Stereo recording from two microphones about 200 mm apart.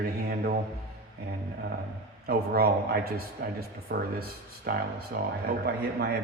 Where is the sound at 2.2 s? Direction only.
50° right (ahead or behind).